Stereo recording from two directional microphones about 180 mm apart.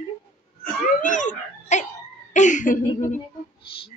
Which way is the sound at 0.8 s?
45° left (ahead or behind).